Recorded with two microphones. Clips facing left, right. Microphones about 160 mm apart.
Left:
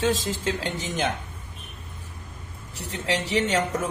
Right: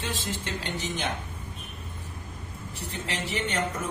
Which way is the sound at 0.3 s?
90° left.